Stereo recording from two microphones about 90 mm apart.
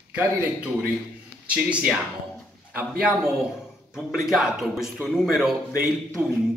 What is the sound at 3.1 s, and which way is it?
Speech, 5° right (ahead or behind).